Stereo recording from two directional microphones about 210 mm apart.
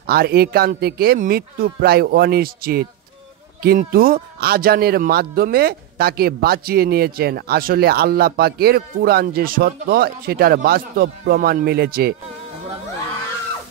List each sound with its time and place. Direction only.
0.0 s speech: 45° right (ahead or behind)